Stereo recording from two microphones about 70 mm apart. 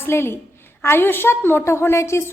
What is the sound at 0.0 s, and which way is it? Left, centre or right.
A woman's voice, left.